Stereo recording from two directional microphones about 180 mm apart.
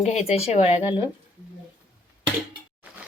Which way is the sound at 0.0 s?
40° left (ahead or behind).